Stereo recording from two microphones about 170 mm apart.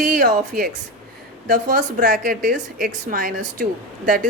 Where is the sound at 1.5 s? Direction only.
50° right (ahead or behind).